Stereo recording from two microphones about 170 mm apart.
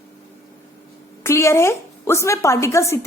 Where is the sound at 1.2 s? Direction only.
15° left (ahead or behind).